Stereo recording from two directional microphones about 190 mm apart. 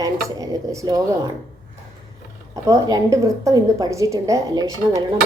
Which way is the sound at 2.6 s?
15° right (ahead or behind).